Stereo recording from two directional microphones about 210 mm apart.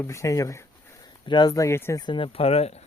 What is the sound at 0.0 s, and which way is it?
Speech, 15° left (ahead or behind).